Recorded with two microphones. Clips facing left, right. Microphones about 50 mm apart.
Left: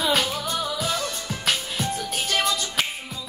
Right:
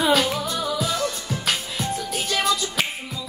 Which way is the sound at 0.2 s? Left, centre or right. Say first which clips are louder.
Right 3 dB; right.